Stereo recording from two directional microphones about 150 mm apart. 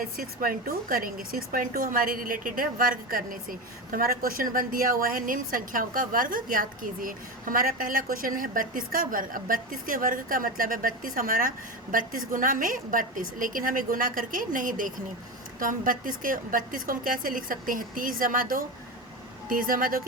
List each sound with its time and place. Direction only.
0.0 s a woman's voice: 70° right (ahead or behind)